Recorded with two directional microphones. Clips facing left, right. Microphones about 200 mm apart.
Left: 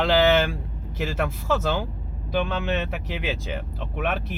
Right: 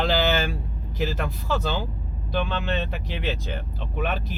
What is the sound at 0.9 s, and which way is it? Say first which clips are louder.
Speech: left 1 dB; centre (ahead or behind).